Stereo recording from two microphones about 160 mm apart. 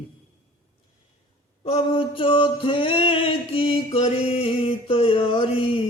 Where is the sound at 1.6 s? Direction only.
35° left (ahead or behind).